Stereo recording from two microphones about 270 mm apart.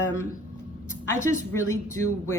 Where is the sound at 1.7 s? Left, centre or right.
Right.